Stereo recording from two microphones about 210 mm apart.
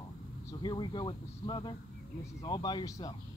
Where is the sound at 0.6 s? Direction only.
20° left (ahead or behind).